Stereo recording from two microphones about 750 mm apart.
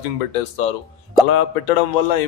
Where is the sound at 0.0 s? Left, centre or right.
Left.